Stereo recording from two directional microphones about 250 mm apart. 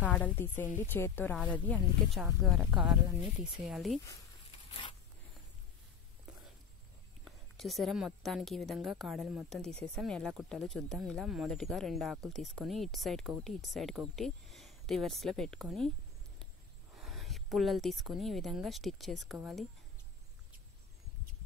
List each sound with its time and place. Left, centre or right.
0.0 s a woman's voice: centre
7.2 s a woman's voice: centre
16.9 s speech: centre